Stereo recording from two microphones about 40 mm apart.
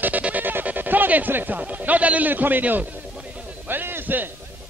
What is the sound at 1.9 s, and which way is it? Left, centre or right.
Music, right.